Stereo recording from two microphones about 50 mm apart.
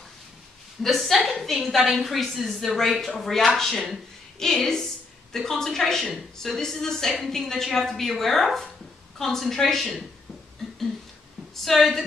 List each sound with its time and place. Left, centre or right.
0.8 s a woman's voice: centre
11.6 s speech: centre